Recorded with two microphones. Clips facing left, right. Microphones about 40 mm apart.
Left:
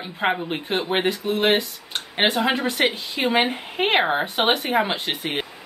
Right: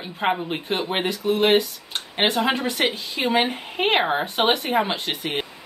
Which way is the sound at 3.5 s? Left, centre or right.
Centre.